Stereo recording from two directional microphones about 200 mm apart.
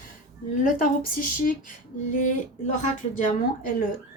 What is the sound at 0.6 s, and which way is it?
Speech, 45° left (ahead or behind).